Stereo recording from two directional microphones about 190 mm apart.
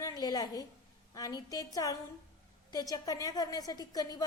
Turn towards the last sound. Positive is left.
turn(degrees=20)  # may be behind; listen again after turning